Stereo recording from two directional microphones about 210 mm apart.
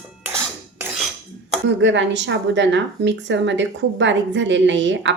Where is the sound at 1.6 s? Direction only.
60° right (ahead or behind).